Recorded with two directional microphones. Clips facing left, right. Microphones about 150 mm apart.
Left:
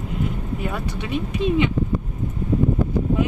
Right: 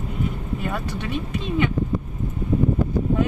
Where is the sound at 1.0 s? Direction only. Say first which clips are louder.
Left 4 dB; 15° left (ahead or behind).